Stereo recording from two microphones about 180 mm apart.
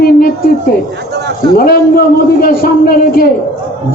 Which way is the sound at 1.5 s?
55° left (ahead or behind).